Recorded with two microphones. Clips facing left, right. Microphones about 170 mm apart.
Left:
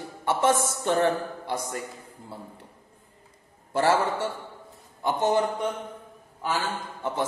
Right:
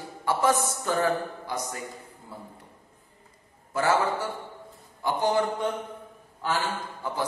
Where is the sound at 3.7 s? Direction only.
30° left (ahead or behind).